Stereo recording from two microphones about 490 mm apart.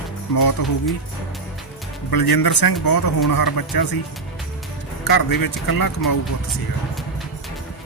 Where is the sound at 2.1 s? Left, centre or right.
Left.